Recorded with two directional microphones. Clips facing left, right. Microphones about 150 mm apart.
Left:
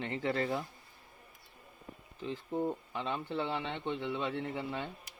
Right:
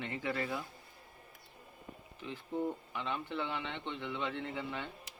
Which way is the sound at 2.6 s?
25° left (ahead or behind).